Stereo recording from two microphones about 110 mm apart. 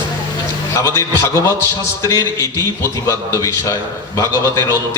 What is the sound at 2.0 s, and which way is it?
A man's voice, 30° left (ahead or behind).